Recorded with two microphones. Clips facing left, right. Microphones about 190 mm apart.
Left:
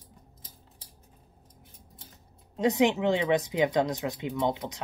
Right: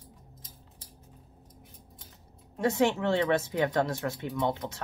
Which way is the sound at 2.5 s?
15° left (ahead or behind).